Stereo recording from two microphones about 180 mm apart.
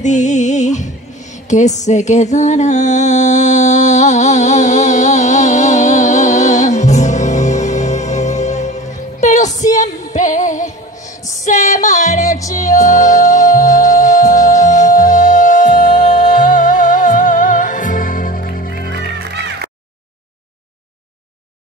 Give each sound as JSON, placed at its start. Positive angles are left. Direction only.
{"t": 0.0, "sound": "music", "side_deg": 40}
{"t": 19.3, "sound": "music", "side_deg": -70}